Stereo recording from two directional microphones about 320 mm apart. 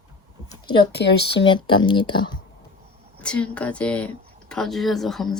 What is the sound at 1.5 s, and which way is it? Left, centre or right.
Speech, centre.